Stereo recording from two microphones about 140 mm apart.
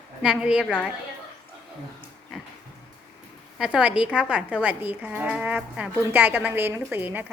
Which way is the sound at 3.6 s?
10° right (ahead or behind).